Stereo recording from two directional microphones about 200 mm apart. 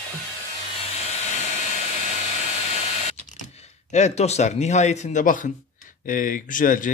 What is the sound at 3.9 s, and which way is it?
Speech, 35° left (ahead or behind).